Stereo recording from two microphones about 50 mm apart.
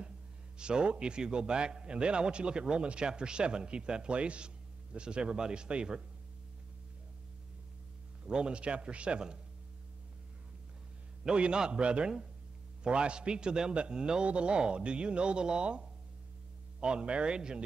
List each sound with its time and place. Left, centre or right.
0.6 s a man's voice: centre
8.3 s a man's voice: centre
11.2 s a man's voice: centre
16.8 s a man's voice: centre